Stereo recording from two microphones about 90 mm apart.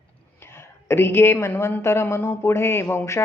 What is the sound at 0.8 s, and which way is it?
A woman's voice, 25° left (ahead or behind).